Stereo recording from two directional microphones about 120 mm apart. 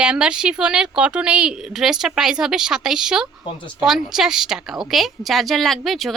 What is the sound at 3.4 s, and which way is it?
Speech, 45° left (ahead or behind).